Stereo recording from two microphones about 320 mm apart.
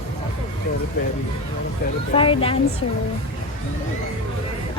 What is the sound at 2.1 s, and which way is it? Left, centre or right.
Speech, centre.